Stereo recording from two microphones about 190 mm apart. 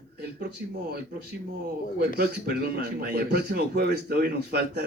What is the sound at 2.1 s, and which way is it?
Speech, 55° right (ahead or behind).